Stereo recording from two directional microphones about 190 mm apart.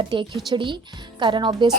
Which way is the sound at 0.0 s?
25° right (ahead or behind).